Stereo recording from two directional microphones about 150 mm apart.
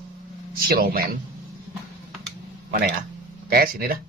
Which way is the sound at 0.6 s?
85° right.